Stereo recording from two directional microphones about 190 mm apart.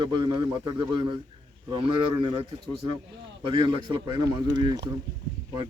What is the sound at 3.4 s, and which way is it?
Speech, 25° right (ahead or behind).